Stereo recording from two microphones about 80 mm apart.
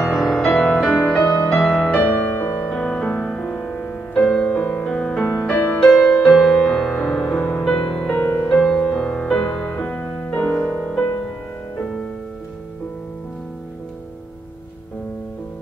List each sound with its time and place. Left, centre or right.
0.0 s music: centre
1.5 s music: centre
1.9 s music: centre
2.7 s music: centre
7.3 s music: left
7.6 s music: centre
8.2 s music: left
8.5 s music: centre
10.8 s music: centre